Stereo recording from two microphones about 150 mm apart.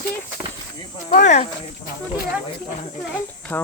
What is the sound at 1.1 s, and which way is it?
Speech, 50° left (ahead or behind).